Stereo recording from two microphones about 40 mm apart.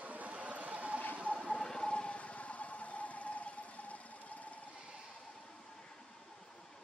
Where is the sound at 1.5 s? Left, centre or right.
Centre.